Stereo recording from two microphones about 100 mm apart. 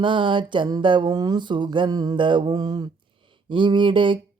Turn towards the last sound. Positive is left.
turn(degrees=-55)  # may be behind; listen again after turning